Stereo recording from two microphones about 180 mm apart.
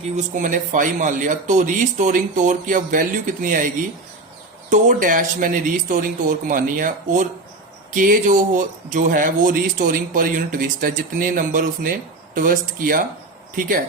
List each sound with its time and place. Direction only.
0.3 s speech: 45° right (ahead or behind)
4.7 s speech: 45° right (ahead or behind)